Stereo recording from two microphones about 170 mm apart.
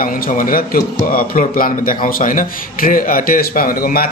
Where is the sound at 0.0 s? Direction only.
55° left (ahead or behind).